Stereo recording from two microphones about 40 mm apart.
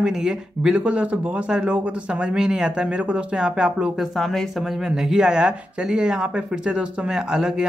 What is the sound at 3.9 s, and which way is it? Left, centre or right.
Speech, centre.